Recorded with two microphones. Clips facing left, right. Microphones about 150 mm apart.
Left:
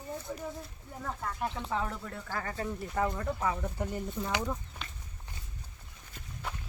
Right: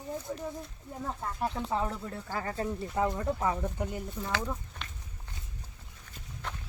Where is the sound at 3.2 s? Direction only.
20° right (ahead or behind).